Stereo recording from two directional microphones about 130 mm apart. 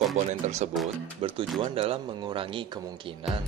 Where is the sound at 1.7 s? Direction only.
45° right (ahead or behind).